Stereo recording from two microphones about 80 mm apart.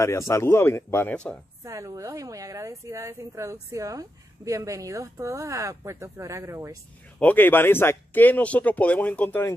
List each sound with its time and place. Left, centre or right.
0.3 s speech: left
1.0 s speech: centre
1.6 s a woman's voice: right
7.2 s speech: left